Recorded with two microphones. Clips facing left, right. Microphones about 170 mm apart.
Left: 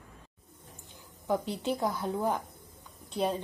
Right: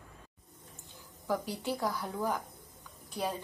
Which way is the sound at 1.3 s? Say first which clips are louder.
Left 3 dB; 20° left (ahead or behind).